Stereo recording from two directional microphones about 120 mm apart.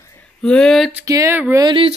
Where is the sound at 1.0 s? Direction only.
25° right (ahead or behind).